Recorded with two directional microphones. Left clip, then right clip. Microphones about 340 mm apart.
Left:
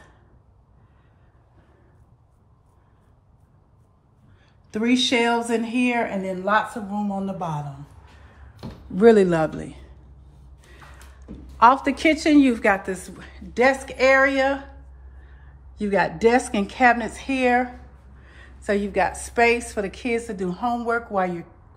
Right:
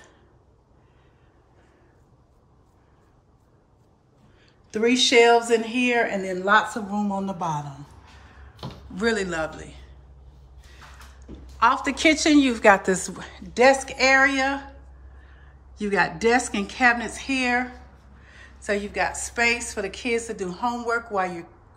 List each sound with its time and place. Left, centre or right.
4.6 s a woman's voice: centre
8.9 s a man's voice: centre
11.6 s a woman's voice: centre